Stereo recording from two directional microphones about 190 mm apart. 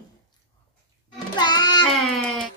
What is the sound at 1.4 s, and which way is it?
Child singing, 20° left (ahead or behind).